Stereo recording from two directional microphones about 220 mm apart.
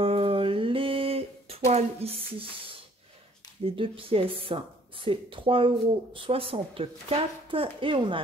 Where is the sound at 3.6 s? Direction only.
25° right (ahead or behind).